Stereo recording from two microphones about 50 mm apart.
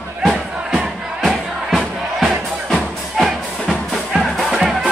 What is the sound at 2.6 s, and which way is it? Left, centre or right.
Music, centre.